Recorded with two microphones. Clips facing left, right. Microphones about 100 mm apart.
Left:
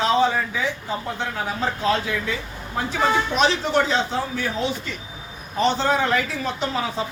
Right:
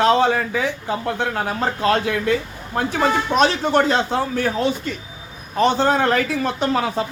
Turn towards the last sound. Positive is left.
turn(degrees=-60)  # may be behind; listen again after turning